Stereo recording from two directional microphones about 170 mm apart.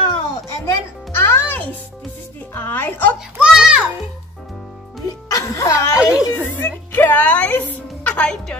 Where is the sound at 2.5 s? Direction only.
10° left (ahead or behind).